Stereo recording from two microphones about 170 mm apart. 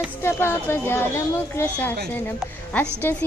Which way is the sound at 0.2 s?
15° left (ahead or behind).